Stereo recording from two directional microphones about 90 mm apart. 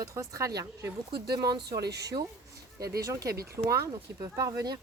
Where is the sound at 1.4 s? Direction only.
50° right (ahead or behind).